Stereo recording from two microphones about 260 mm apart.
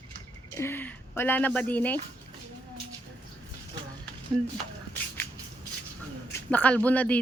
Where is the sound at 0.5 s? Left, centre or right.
Centre.